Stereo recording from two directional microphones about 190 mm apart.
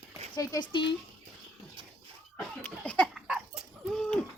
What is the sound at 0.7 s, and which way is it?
Speech, 25° left (ahead or behind).